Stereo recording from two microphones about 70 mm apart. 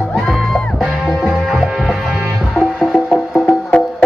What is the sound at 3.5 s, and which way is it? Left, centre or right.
Music, left.